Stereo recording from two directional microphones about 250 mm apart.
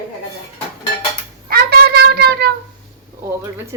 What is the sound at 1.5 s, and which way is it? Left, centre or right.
Cat, right.